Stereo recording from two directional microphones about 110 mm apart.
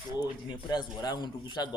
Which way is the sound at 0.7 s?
40° left (ahead or behind).